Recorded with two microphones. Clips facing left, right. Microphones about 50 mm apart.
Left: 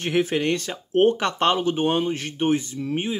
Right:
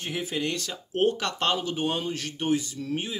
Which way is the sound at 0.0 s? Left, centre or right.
Left.